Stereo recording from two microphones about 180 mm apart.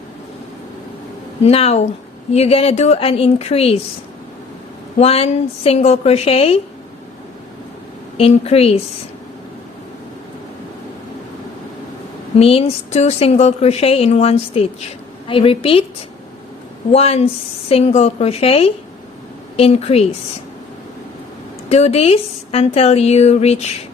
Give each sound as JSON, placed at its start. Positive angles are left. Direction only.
{"t": 1.5, "sound": "a woman's voice", "side_deg": 35}
{"t": 4.9, "sound": "a woman's voice", "side_deg": 35}
{"t": 8.2, "sound": "a woman's voice", "side_deg": 35}
{"t": 12.4, "sound": "a woman's voice", "side_deg": 35}
{"t": 16.9, "sound": "a woman's voice", "side_deg": 35}
{"t": 21.7, "sound": "a woman's voice", "side_deg": 35}